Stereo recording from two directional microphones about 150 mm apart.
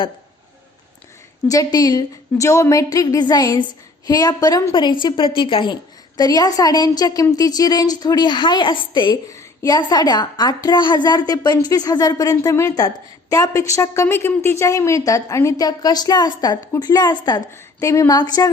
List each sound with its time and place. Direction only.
1.5 s a woman's voice: 25° left (ahead or behind)